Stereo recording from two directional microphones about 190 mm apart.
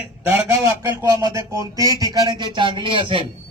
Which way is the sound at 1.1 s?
20° right (ahead or behind).